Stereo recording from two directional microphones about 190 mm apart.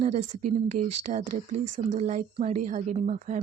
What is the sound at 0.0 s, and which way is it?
Speech, 40° right (ahead or behind).